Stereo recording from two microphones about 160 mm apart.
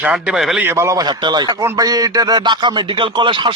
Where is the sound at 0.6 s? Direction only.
15° right (ahead or behind).